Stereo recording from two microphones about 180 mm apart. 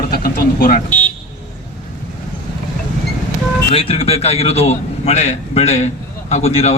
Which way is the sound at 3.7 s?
30° left (ahead or behind).